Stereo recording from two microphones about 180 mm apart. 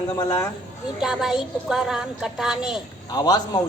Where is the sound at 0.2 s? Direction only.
15° left (ahead or behind).